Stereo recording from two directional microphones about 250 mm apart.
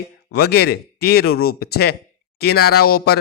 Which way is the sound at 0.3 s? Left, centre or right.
Left.